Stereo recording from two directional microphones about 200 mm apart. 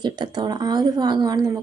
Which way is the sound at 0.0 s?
20° right (ahead or behind).